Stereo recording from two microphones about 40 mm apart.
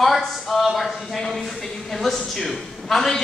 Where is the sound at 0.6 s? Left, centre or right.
Centre.